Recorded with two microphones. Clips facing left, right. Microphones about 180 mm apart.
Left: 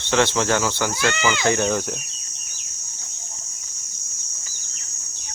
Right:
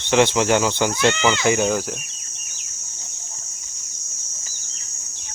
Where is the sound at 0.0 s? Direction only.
15° right (ahead or behind).